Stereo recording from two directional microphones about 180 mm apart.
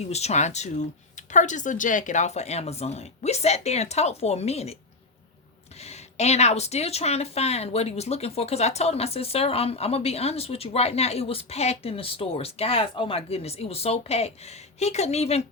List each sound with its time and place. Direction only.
0.0 s speech: 35° left (ahead or behind)
5.8 s speech: 35° left (ahead or behind)